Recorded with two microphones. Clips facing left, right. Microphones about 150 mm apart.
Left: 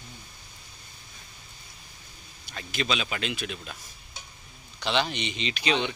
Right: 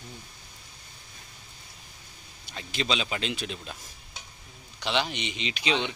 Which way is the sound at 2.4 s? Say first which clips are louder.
Even; 25° right (ahead or behind).